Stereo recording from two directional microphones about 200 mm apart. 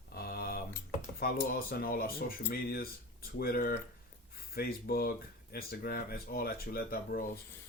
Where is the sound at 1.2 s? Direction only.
50° left (ahead or behind).